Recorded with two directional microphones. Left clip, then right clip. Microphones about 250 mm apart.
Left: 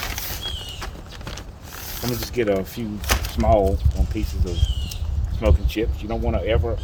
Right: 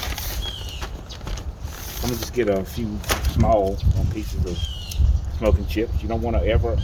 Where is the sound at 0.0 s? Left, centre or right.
Left.